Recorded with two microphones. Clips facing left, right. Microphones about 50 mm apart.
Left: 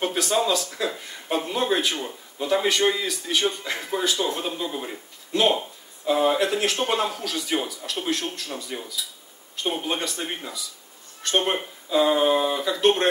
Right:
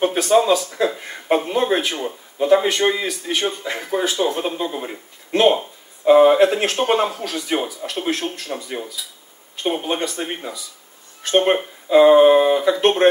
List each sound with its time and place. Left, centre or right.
0.0 s speech: right
5.3 s speech: right
10.1 s speech: right